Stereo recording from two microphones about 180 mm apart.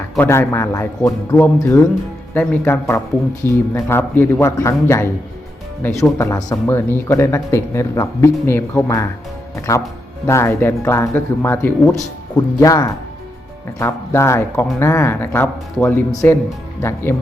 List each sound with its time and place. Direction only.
0.2 s speech: 15° left (ahead or behind)
6.1 s speech: 15° left (ahead or behind)